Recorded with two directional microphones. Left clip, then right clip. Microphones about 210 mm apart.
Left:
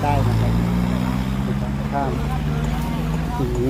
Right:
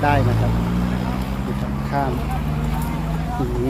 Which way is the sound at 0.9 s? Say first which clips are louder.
Left 1 dB; 55° left (ahead or behind).